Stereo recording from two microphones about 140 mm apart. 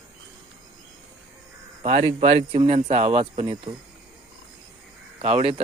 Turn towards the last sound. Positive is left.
turn(degrees=-45)  # may be behind; listen again after turning